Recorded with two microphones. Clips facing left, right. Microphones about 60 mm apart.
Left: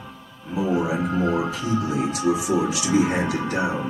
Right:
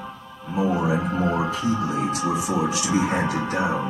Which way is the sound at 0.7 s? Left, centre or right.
Right.